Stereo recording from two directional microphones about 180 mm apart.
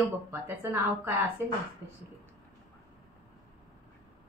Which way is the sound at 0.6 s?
10° right (ahead or behind).